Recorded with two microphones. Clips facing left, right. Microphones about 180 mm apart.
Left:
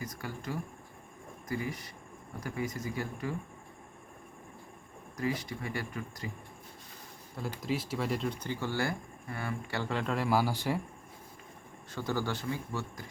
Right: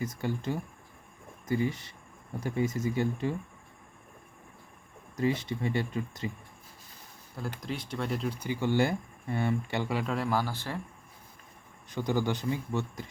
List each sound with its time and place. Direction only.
0.0 s speech: 25° right (ahead or behind)
5.1 s speech: 25° right (ahead or behind)
7.3 s speech: centre (ahead or behind)
11.9 s a man's voice: 15° right (ahead or behind)